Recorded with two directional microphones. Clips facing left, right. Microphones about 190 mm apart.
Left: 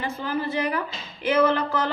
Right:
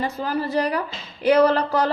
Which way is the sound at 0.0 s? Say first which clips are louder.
Right 3 dB; 35° right (ahead or behind).